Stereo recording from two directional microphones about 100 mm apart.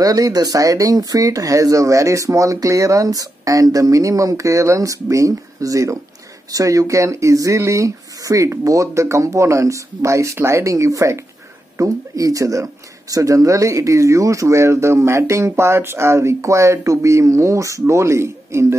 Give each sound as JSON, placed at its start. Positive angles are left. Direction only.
{"t": 0.0, "sound": "speech", "side_deg": -35}